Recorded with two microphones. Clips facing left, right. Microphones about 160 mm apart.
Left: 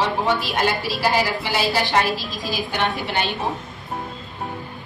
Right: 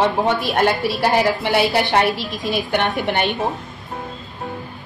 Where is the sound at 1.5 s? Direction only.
60° right (ahead or behind).